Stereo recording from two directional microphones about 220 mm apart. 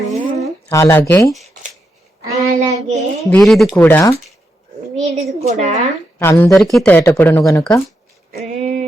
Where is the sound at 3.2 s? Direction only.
5° left (ahead or behind).